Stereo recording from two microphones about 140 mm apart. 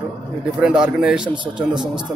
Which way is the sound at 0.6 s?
5° right (ahead or behind).